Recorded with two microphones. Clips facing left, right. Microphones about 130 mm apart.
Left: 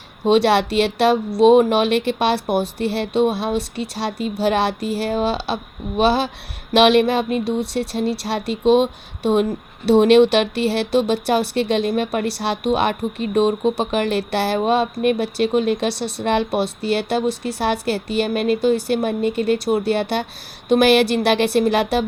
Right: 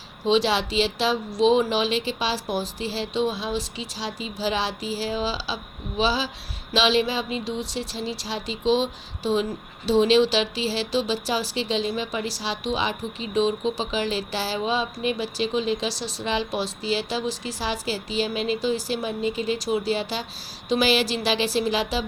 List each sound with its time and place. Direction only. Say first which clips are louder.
0.3 s speech: left 6 dB; 60° left (ahead or behind)